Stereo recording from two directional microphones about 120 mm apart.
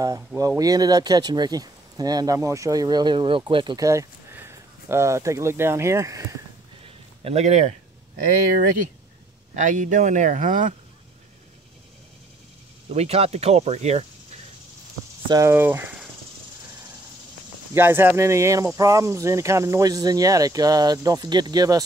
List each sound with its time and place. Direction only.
0.4 s speech: 30° right (ahead or behind)
3.7 s speech: 25° right (ahead or behind)
7.2 s speech: 65° right (ahead or behind)
9.6 s speech: 90° right
12.8 s speech: 60° right (ahead or behind)
15.4 s speech: 20° right (ahead or behind)
17.7 s speech: 15° right (ahead or behind)